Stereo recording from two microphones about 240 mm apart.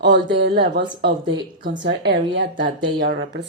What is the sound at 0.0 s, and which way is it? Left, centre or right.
Speech, right.